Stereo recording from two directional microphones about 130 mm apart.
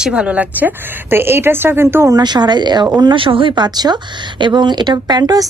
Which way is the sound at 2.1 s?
35° right (ahead or behind).